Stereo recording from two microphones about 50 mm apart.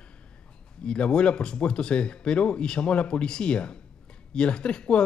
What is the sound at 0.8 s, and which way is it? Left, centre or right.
Speech, centre.